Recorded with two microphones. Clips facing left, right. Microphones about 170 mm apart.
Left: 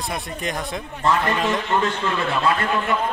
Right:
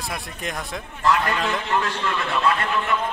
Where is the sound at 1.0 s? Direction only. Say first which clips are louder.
Left 1 dB; 25° left (ahead or behind).